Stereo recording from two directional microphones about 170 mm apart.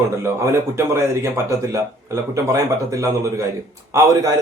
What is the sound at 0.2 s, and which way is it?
A man's voice, 15° right (ahead or behind).